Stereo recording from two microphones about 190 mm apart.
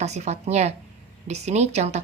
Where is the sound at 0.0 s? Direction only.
35° right (ahead or behind).